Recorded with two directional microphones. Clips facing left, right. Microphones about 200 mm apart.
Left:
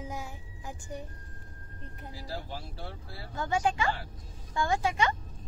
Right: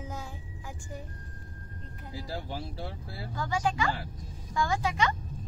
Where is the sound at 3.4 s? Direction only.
25° left (ahead or behind).